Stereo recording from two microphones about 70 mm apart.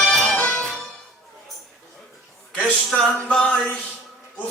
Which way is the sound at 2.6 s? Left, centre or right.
Centre.